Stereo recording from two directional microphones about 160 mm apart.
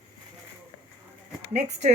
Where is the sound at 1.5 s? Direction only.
45° right (ahead or behind).